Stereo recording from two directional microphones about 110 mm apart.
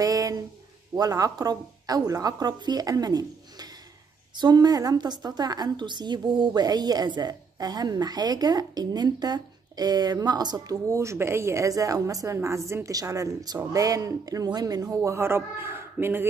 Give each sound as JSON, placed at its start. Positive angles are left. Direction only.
{"t": 0.0, "sound": "a sound", "side_deg": -35}
{"t": 0.9, "sound": "a woman's voice", "side_deg": -35}
{"t": 15.0, "sound": "a man's voice", "side_deg": -20}